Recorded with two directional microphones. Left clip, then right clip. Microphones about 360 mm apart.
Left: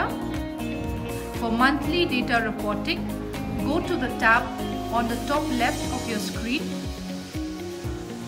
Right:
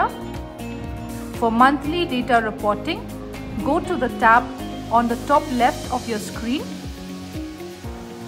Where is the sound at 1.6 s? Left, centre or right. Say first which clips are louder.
Right 4 dB; centre.